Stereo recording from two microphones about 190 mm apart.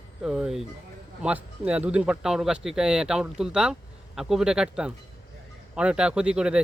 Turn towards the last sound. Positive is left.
turn(degrees=-5)  # may be behind; listen again after turning